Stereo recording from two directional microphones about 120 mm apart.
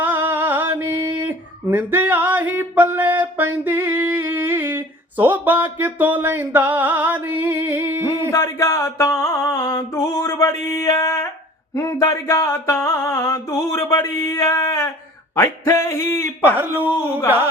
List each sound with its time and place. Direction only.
0.0 s a sound: 15° right (ahead or behind)
8.0 s music: 30° left (ahead or behind)
16.4 s a man's voice: 15° right (ahead or behind)